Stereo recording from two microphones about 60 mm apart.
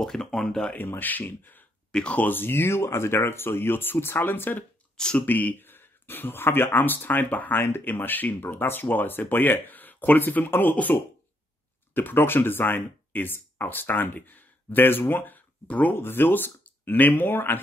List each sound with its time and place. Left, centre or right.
0.0 s speech: centre
0.7 s speech: left
1.9 s speech: centre
2.1 s speech: left
4.9 s speech: centre
5.2 s speech: left
16.0 s speech: left